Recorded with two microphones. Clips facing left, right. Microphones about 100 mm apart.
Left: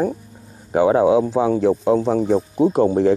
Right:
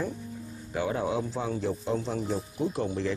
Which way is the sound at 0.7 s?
80° left.